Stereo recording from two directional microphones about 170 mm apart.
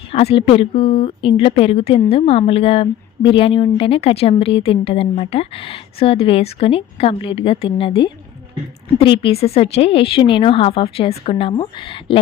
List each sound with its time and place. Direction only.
0.1 s a woman's voice: 35° left (ahead or behind)